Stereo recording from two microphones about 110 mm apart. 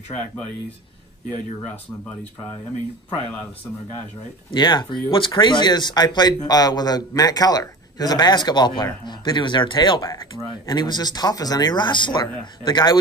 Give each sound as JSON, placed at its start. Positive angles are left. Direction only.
{"t": 4.5, "sound": "speech", "side_deg": 45}